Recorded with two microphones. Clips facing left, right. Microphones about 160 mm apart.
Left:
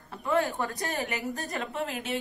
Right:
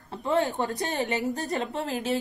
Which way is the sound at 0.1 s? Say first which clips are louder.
Right 2 dB; 25° right (ahead or behind).